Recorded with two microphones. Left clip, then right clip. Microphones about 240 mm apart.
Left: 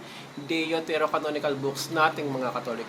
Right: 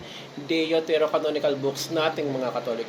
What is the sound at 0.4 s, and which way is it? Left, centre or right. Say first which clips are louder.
Speech: right 4 dB; centre.